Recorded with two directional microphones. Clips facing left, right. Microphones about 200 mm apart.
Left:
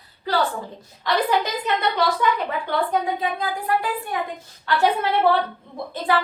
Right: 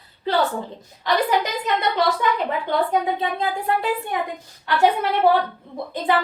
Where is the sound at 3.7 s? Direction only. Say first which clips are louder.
Left 1 dB; 25° right (ahead or behind).